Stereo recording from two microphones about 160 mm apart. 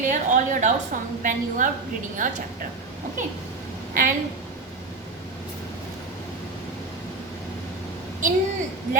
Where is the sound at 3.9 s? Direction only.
60° right (ahead or behind).